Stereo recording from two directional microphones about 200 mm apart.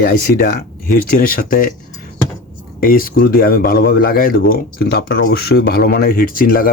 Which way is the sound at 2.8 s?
45° left (ahead or behind).